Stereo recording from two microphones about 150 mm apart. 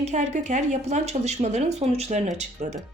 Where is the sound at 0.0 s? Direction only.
50° right (ahead or behind).